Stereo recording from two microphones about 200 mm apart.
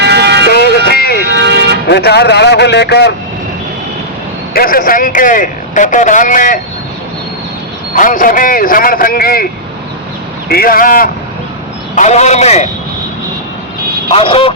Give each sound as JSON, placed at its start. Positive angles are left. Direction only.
{"t": 0.0, "sound": "vehicle", "side_deg": -55}
{"t": 0.5, "sound": "music", "side_deg": 50}
{"t": 1.3, "sound": "vehicle", "side_deg": -55}
{"t": 1.9, "sound": "a man's voice", "side_deg": 55}
{"t": 4.5, "sound": "a man's voice", "side_deg": 45}
{"t": 7.9, "sound": "speech", "side_deg": 40}
{"t": 10.5, "sound": "a man's voice", "side_deg": 45}
{"t": 14.1, "sound": "speech", "side_deg": 25}